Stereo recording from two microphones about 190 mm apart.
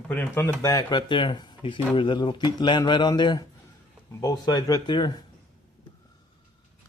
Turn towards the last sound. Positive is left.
turn(degrees=25)  # may be behind; listen again after turning